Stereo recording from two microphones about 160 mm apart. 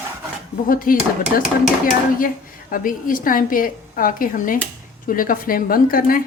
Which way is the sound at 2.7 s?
60° left (ahead or behind).